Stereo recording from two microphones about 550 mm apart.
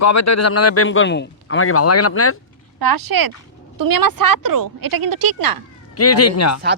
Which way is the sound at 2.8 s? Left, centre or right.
Right.